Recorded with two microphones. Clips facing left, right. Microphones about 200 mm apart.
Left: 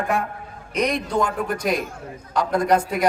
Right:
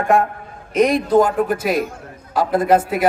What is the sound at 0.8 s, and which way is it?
A man's voice, 5° right (ahead or behind).